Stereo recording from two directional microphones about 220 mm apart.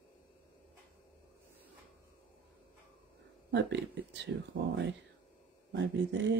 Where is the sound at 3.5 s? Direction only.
50° right (ahead or behind).